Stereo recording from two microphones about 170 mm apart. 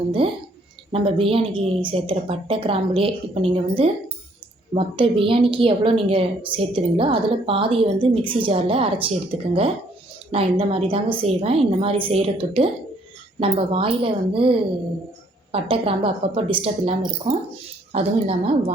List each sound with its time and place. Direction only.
0.9 s a woman's voice: 35° right (ahead or behind)
15.5 s a woman's voice: 30° right (ahead or behind)